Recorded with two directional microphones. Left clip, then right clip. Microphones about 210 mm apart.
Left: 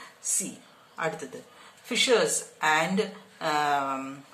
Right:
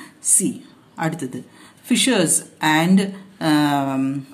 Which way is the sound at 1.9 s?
45° right (ahead or behind).